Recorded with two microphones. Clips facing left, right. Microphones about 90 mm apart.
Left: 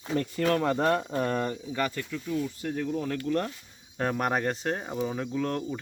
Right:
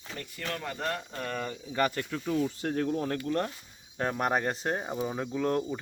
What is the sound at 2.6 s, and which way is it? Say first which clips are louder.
Speech: right 2 dB; 75° right (ahead or behind).